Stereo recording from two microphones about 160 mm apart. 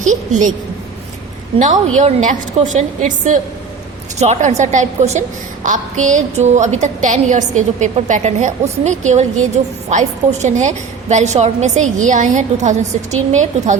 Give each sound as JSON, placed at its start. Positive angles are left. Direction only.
{"t": 0.0, "sound": "a woman's voice", "side_deg": -50}
{"t": 1.5, "sound": "a woman's voice", "side_deg": -50}